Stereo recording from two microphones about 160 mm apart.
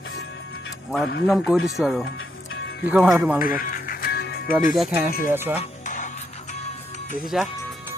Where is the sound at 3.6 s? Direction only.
60° left (ahead or behind); by 4.5 s 85° left.